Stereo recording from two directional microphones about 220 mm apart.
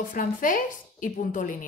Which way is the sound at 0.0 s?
35° left (ahead or behind).